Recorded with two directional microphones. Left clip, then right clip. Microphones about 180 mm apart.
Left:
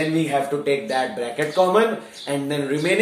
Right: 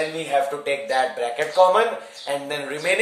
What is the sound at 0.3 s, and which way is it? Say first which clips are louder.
Speech: left 1 dB; 25° right (ahead or behind).